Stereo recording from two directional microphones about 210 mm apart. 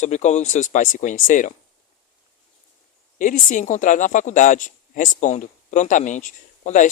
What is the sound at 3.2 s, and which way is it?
Speech, 40° left (ahead or behind).